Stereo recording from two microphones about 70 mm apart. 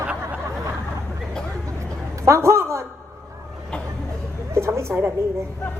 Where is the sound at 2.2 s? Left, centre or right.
Right.